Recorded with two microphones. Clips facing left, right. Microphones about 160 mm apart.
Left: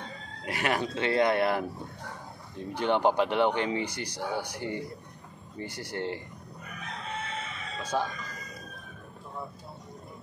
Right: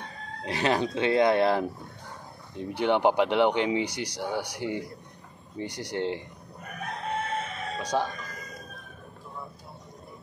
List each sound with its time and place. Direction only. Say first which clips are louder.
0.5 s speech: right 4 dB; 20° right (ahead or behind)
6.6 s chicken: right 6 dB; 50° right (ahead or behind)
7.8 s speech: right 2 dB; 15° right (ahead or behind)